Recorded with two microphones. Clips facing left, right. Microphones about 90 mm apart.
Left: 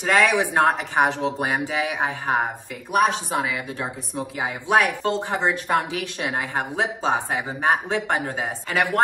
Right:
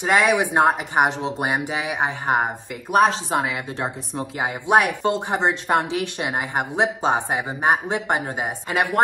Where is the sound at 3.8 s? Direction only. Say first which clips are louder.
Right 2 dB; 25° right (ahead or behind).